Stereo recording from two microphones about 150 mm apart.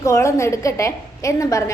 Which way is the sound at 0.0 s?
20° left (ahead or behind).